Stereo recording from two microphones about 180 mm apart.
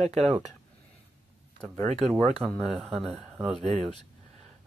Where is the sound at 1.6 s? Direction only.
5° left (ahead or behind).